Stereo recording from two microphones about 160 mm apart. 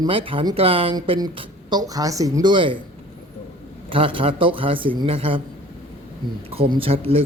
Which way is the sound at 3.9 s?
35° right (ahead or behind).